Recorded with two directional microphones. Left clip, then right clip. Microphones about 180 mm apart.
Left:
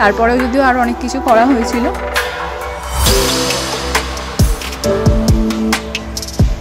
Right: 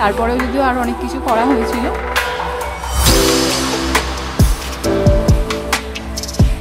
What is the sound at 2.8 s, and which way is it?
Music, centre (ahead or behind).